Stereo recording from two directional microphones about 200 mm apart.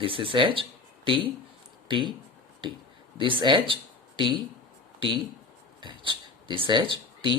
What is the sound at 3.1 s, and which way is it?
Speech, 25° right (ahead or behind).